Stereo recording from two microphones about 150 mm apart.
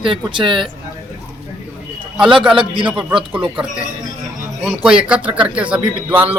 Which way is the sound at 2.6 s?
35° right (ahead or behind).